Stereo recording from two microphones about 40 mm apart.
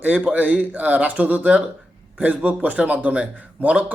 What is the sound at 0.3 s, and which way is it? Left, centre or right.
Speech, right.